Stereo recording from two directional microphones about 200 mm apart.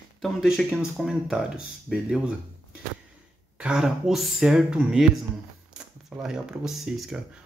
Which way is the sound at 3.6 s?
5° right (ahead or behind).